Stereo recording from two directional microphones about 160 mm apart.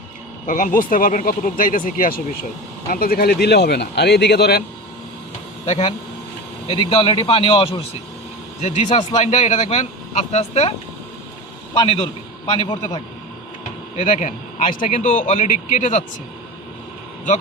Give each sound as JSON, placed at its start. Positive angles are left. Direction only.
{"t": 0.4, "sound": "speech", "side_deg": 55}
{"t": 5.6, "sound": "a man's voice", "side_deg": 45}
{"t": 6.7, "sound": "a man's voice", "side_deg": 35}
{"t": 12.6, "sound": "a man's voice", "side_deg": 25}
{"t": 13.9, "sound": "a man's voice", "side_deg": 45}